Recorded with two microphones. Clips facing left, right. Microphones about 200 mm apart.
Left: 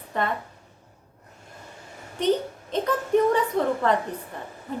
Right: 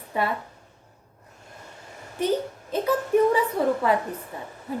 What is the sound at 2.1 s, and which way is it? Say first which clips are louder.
A child's voice: left 1 dB; 5° right (ahead or behind).